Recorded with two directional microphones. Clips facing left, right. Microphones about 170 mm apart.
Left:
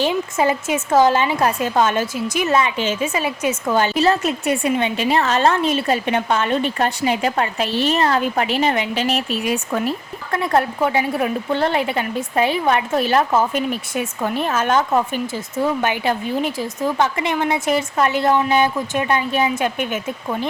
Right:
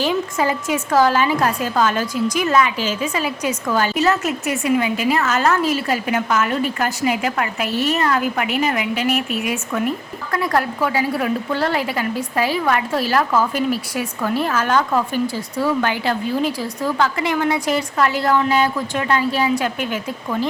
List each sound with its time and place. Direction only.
0.0 s a woman's voice: 20° left (ahead or behind)